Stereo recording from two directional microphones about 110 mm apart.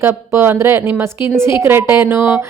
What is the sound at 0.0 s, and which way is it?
A woman's voice, 20° right (ahead or behind).